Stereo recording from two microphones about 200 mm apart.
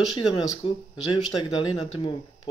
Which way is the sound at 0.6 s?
20° left (ahead or behind).